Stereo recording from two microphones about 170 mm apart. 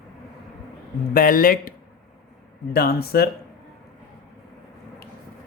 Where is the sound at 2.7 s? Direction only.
65° left (ahead or behind).